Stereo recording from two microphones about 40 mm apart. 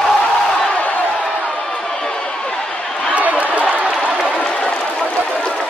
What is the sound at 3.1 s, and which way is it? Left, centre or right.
Run, right.